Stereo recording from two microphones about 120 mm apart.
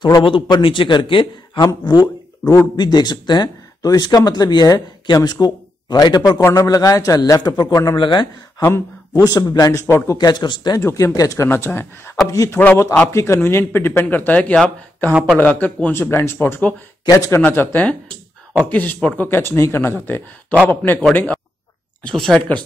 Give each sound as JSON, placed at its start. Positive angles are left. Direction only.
{"t": 0.0, "sound": "a man's voice", "side_deg": 40}
{"t": 1.6, "sound": "a man's voice", "side_deg": 25}
{"t": 2.7, "sound": "a man's voice", "side_deg": 35}
{"t": 8.6, "sound": "a man's voice", "side_deg": 25}
{"t": 10.1, "sound": "speech", "side_deg": 35}
{"t": 10.8, "sound": "a man's voice", "side_deg": 20}
{"t": 17.0, "sound": "a man's voice", "side_deg": 30}
{"t": 17.4, "sound": "a man's voice", "side_deg": 15}
{"t": 22.0, "sound": "speech", "side_deg": 5}